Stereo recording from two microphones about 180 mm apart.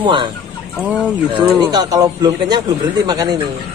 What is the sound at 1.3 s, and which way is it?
Speech, 25° right (ahead or behind).